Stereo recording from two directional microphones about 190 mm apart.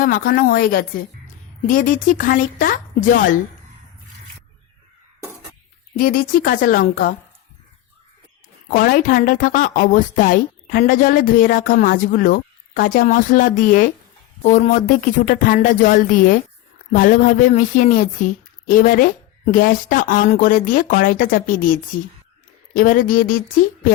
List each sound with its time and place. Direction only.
0.0 s a woman's voice: 50° left (ahead or behind)
6.0 s a woman's voice: 45° left (ahead or behind)
8.6 s a woman's voice: 50° left (ahead or behind)